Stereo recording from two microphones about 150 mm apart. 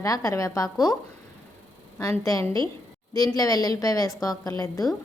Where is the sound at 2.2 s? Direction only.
20° left (ahead or behind).